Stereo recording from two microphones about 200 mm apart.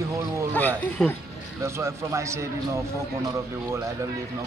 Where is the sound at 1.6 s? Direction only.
15° right (ahead or behind).